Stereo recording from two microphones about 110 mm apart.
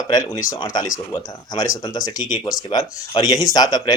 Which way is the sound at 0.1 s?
35° left (ahead or behind).